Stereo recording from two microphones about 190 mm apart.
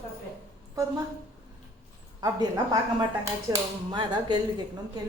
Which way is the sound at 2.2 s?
20° right (ahead or behind).